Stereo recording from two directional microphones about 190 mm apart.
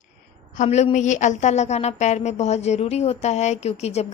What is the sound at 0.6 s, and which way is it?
A woman's voice, 35° left (ahead or behind).